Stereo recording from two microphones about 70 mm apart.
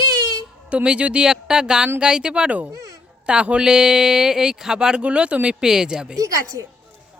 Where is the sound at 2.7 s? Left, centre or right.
Right.